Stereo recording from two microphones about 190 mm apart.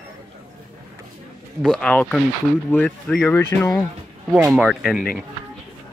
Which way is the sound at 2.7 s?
5° left (ahead or behind).